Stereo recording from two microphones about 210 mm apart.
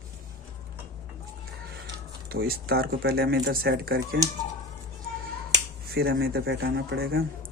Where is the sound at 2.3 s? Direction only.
45° right (ahead or behind).